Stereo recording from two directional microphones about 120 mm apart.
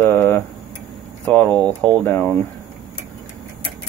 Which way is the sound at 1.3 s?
15° left (ahead or behind).